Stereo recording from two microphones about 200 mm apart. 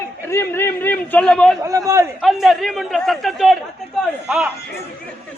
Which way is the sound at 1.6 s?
15° right (ahead or behind).